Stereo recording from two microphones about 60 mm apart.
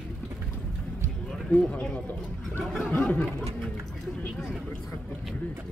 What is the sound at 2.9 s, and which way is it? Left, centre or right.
Speech, left.